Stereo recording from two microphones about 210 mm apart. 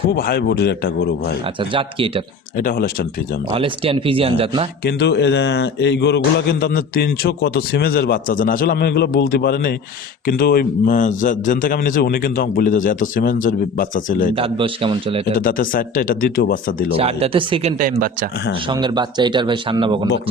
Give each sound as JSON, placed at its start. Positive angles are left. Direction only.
{"t": 0.1, "sound": "speech", "side_deg": 45}
{"t": 1.5, "sound": "speech", "side_deg": -25}
{"t": 2.6, "sound": "speech", "side_deg": 40}
{"t": 3.5, "sound": "speech", "side_deg": -25}
{"t": 4.8, "sound": "a man's voice", "side_deg": 50}
{"t": 14.3, "sound": "speech", "side_deg": -25}
{"t": 15.4, "sound": "a man's voice", "side_deg": 40}
{"t": 16.9, "sound": "speech", "side_deg": -30}
{"t": 18.7, "sound": "speech", "side_deg": -20}